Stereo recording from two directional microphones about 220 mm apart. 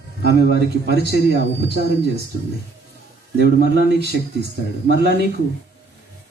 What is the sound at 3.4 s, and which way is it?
Speech, 50° right (ahead or behind).